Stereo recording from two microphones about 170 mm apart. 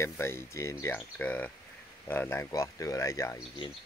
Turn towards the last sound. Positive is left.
turn(degrees=20)  # may be behind; listen again after turning